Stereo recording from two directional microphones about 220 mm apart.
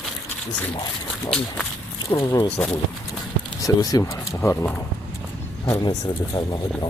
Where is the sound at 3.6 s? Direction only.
15° left (ahead or behind).